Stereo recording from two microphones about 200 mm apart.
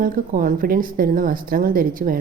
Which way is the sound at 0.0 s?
45° right (ahead or behind).